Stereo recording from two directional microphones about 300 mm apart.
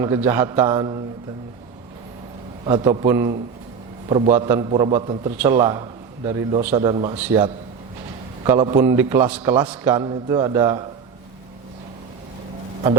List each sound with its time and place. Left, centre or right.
0.0 s a man's voice: centre
2.6 s a man's voice: centre
7.2 s a man's voice: centre
8.4 s a man's voice: centre